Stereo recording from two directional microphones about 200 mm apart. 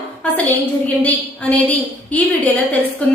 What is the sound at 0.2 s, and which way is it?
A woman's voice, 5° left (ahead or behind).